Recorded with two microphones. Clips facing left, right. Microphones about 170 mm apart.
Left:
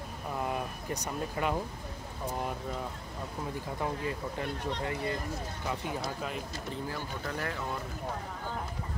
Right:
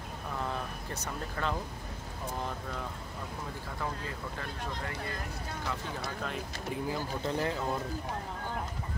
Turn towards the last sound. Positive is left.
turn(degrees=-25)  # may be behind; listen again after turning